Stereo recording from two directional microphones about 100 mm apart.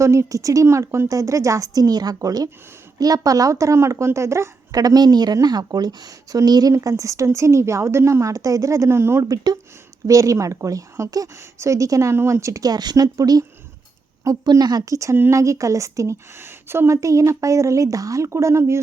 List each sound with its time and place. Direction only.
0.0 s a woman's voice: 30° right (ahead or behind)